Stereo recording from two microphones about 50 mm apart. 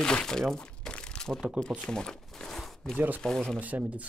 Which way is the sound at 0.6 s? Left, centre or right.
Left.